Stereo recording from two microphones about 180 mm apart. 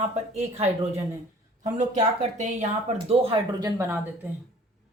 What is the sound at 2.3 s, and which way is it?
Speech, 40° right (ahead or behind).